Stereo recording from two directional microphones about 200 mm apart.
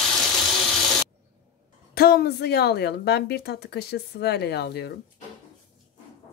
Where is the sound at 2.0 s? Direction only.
50° left (ahead or behind).